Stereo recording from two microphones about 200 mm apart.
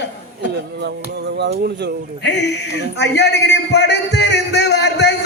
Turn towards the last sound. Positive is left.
turn(degrees=55)  # may be behind; listen again after turning